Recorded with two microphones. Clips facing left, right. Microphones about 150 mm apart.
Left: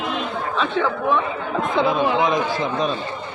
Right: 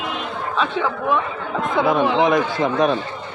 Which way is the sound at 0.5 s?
10° right (ahead or behind).